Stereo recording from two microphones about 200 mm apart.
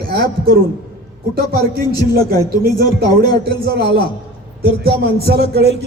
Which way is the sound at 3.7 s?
50° right (ahead or behind).